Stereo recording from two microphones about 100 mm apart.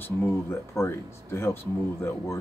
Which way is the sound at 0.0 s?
25° left (ahead or behind).